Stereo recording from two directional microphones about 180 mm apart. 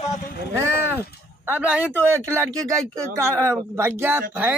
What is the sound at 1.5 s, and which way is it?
Speech, 5° right (ahead or behind).